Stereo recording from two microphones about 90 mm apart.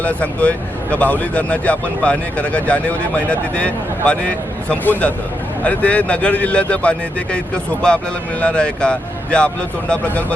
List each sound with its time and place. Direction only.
0.0 s speech: 15° left (ahead or behind)